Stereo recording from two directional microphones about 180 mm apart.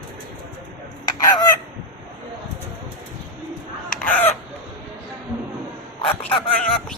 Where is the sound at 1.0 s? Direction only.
20° left (ahead or behind).